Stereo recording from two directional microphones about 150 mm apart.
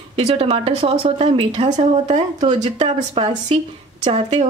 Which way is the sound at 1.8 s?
45° right (ahead or behind).